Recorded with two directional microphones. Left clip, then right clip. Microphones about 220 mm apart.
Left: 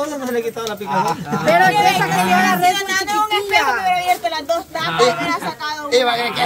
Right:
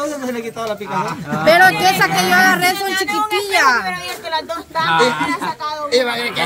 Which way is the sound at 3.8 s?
20° left (ahead or behind).